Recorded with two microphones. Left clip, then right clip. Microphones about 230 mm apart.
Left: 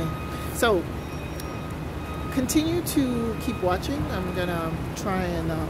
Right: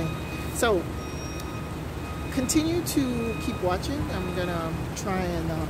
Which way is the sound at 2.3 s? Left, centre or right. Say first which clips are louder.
Left 1 dB; centre.